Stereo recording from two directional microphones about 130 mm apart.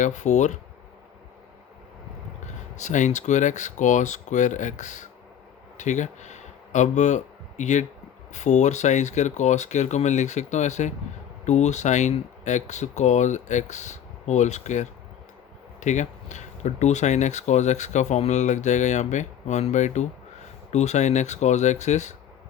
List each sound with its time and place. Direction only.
0.0 s speech: 65° left (ahead or behind)
2.7 s speech: 70° left (ahead or behind)